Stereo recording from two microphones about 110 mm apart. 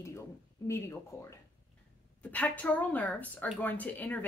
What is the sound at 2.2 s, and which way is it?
A woman's voice, 15° left (ahead or behind).